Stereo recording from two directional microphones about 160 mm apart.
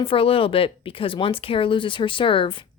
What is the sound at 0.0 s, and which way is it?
Speech, 35° left (ahead or behind).